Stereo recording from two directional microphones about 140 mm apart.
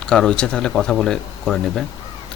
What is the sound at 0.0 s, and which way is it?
Speech, 5° left (ahead or behind).